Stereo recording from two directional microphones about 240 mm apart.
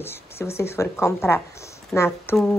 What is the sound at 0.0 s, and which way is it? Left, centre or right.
Speech, centre.